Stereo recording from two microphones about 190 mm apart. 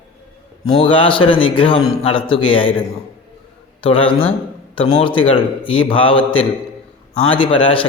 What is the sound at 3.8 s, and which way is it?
A man's voice, 30° left (ahead or behind).